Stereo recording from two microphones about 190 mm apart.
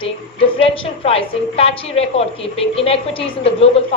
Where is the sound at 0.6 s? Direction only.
30° left (ahead or behind).